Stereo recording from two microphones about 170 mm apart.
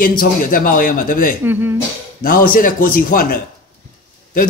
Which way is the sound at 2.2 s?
55° left (ahead or behind).